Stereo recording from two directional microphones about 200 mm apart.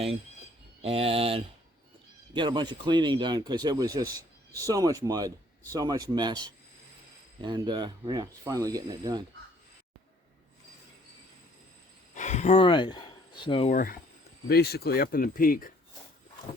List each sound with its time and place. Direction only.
0.8 s speech: 30° right (ahead or behind)
12.1 s speech: 35° left (ahead or behind)
13.7 s speech: 45° left (ahead or behind)